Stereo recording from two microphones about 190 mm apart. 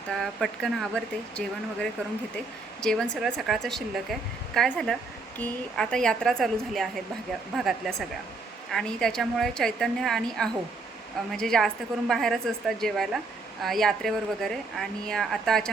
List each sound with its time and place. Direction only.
0.1 s a woman's voice: centre (ahead or behind)